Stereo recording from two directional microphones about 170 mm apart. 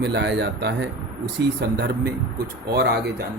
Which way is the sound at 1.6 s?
70° right (ahead or behind).